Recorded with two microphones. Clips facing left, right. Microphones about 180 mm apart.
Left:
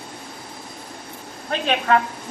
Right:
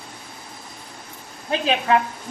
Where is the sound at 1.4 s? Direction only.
5° right (ahead or behind).